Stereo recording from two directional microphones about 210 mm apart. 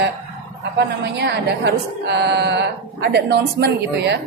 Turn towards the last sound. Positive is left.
turn(degrees=-50)  # may be behind; listen again after turning